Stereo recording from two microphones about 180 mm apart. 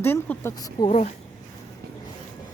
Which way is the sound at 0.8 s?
35° left (ahead or behind).